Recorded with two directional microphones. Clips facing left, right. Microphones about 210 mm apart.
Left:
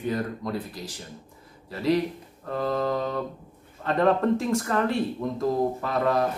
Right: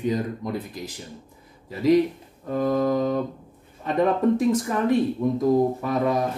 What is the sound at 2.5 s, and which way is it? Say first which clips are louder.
Speech: right 4 dB; 10° right (ahead or behind).